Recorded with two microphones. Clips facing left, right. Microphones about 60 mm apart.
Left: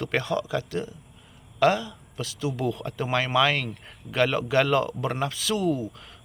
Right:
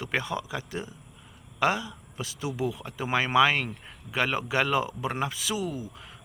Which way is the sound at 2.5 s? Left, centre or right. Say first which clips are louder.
Left 1 dB; centre.